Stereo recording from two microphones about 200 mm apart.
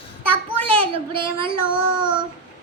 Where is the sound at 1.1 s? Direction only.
25° right (ahead or behind).